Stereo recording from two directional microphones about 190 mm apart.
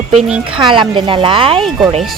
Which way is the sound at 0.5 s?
25° right (ahead or behind).